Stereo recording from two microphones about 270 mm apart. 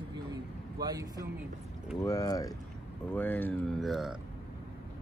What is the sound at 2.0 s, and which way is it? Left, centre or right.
Speech, centre.